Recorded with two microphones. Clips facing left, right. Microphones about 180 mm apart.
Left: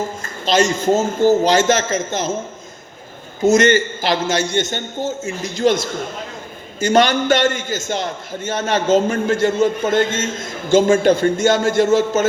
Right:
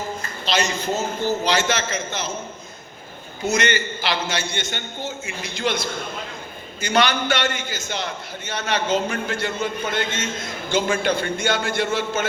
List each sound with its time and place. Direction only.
0.2 s a man's voice: 45° left (ahead or behind)
3.4 s a man's voice: 45° left (ahead or behind)